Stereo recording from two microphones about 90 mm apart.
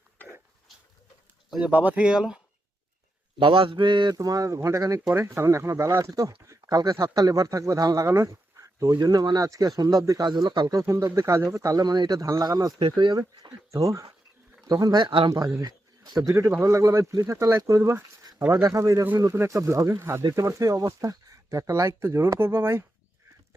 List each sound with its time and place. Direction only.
1.6 s speech: 20° right (ahead or behind)
3.3 s mantra: 75° right (ahead or behind)
4.1 s speech: 40° right (ahead or behind)
10.2 s speech: 55° right (ahead or behind)
10.8 s speech: 35° right (ahead or behind)
12.8 s mantra: 60° right (ahead or behind)
13.1 s speech: 50° right (ahead or behind); by 22.9 s 30° right (ahead or behind)